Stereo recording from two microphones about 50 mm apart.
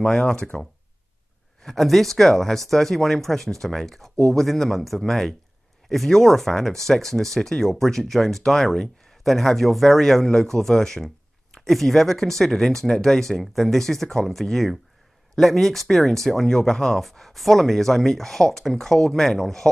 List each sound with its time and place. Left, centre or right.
0.0 s speech: centre
1.6 s speech: centre